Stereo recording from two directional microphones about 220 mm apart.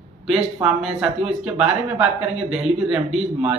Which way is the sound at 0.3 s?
5° right (ahead or behind).